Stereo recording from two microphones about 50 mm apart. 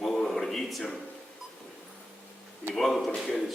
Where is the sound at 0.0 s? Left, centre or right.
Centre.